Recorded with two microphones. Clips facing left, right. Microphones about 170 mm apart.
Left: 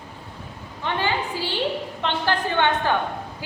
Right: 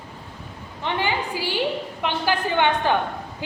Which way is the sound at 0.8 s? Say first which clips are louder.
Even; 15° right (ahead or behind).